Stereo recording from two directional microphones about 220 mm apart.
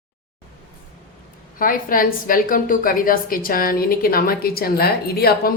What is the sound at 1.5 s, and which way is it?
A woman's voice, 40° left (ahead or behind).